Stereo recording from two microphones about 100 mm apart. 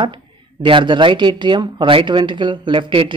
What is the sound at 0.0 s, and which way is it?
Speech, 55° right (ahead or behind).